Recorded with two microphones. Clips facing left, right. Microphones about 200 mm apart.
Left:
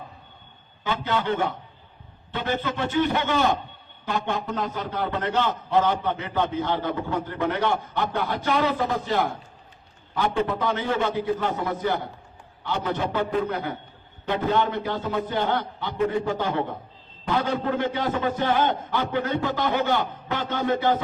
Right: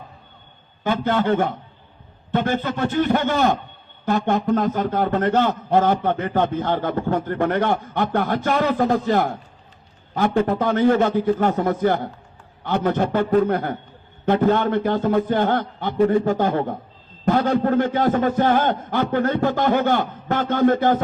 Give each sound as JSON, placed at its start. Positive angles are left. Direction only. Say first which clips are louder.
{"t": 0.9, "sound": "a man's voice", "louder": "right 6 dB", "side_deg": -50}